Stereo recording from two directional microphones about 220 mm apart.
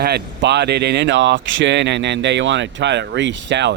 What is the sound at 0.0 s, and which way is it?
Speech, 50° right (ahead or behind).